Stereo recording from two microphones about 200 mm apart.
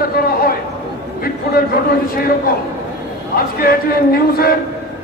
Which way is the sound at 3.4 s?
50° left (ahead or behind).